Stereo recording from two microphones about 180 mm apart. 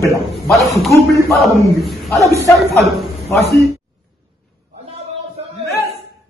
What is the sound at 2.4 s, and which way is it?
Speech, 15° left (ahead or behind).